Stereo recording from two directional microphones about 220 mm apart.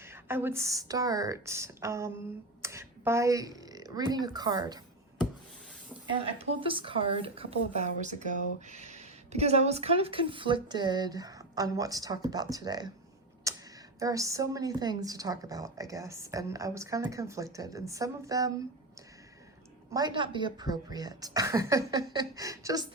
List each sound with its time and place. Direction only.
0.0 s a woman's voice: 10° right (ahead or behind)
6.1 s speech: 25° right (ahead or behind)
13.5 s a sound: 15° right (ahead or behind)
14.0 s a woman's voice: 15° right (ahead or behind)
19.9 s a woman's voice: 20° right (ahead or behind)